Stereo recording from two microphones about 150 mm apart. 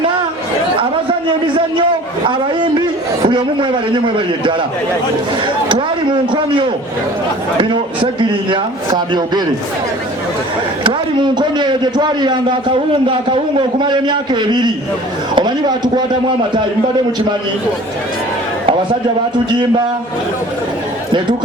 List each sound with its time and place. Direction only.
1.5 s a man's voice: 35° right (ahead or behind)
6.3 s a man's voice: 35° right (ahead or behind)
8.2 s a man's voice: 30° right (ahead or behind)
10.8 s a man's voice: 30° right (ahead or behind)